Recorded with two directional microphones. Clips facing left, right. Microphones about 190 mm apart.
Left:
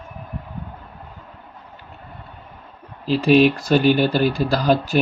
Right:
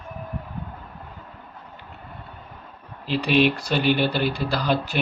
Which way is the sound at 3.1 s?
40° left (ahead or behind).